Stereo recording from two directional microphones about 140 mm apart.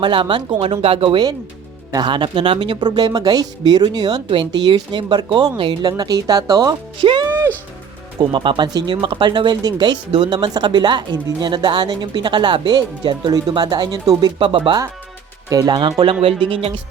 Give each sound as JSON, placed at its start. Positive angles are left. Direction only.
{"t": 0.0, "sound": "speech", "side_deg": -35}
{"t": 7.3, "sound": "music", "side_deg": -15}
{"t": 8.3, "sound": "speech", "side_deg": -35}